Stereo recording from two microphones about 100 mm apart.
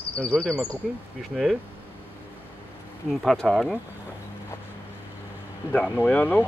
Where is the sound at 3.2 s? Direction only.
Centre (ahead or behind).